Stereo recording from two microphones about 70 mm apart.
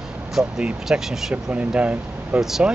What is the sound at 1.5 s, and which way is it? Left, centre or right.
Speech, centre.